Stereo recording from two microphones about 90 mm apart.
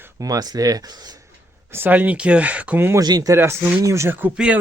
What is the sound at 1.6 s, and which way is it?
Speech, 25° right (ahead or behind).